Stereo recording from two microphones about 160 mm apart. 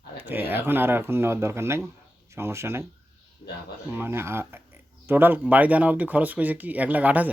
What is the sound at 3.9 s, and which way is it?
Speech, 15° right (ahead or behind).